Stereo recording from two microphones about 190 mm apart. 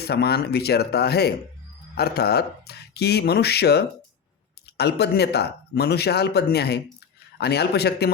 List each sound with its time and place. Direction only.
0.0 s speech: 60° left (ahead or behind)